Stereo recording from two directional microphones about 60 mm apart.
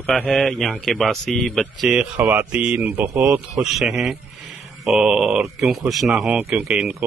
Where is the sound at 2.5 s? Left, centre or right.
Right.